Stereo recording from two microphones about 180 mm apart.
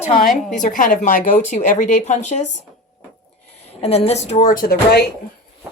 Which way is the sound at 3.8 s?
35° left (ahead or behind).